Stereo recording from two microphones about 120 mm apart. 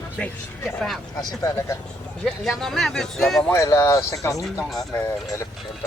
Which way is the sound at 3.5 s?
25° left (ahead or behind).